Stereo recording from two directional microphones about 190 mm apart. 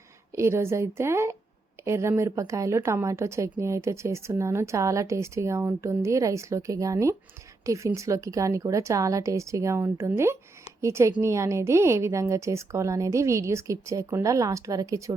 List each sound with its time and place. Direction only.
0.3 s a woman's voice: 15° right (ahead or behind)